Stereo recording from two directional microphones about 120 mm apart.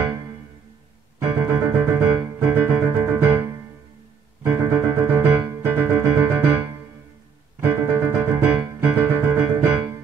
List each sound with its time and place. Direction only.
1.4 s music: 20° right (ahead or behind)